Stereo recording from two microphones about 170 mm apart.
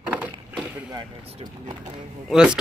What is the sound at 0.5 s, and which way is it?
Vehicle, 5° right (ahead or behind).